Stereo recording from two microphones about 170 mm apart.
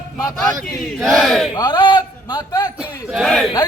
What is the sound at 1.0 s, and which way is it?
Battle cry, centre (ahead or behind).